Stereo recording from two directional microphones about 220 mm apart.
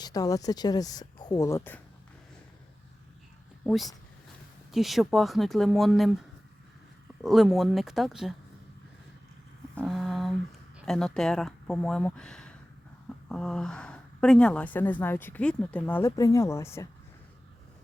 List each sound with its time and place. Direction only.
0.0 s a woman's voice: 15° left (ahead or behind)
4.7 s speech: centre (ahead or behind)
7.2 s speech: centre (ahead or behind)
9.7 s a sound: centre (ahead or behind)
10.8 s a woman's voice: centre (ahead or behind)